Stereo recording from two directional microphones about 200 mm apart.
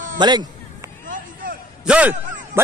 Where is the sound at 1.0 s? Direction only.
45° right (ahead or behind).